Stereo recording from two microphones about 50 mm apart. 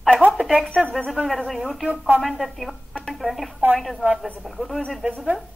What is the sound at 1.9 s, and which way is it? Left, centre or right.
Speech, right.